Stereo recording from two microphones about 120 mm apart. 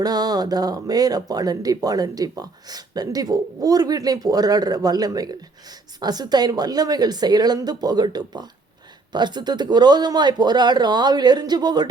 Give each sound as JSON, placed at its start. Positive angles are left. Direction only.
{"t": 0.0, "sound": "speech", "side_deg": -35}